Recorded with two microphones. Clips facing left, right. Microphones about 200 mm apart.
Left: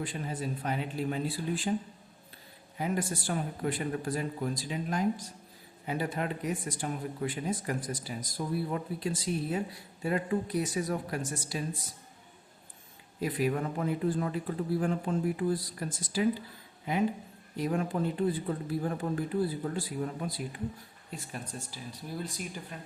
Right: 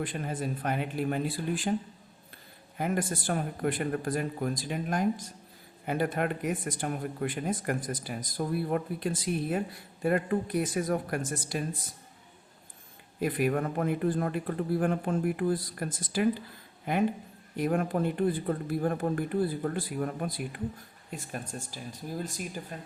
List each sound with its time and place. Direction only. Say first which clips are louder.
0.0 s a man's voice: right 2 dB; 55° right (ahead or behind)
2.7 s a man's voice: right 2 dB; 55° right (ahead or behind)
13.1 s speech: right 2 dB; 55° right (ahead or behind)
17.6 s a man's voice: right 3 dB; 55° right (ahead or behind)